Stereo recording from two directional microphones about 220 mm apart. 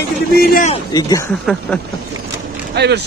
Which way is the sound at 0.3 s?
45° left (ahead or behind).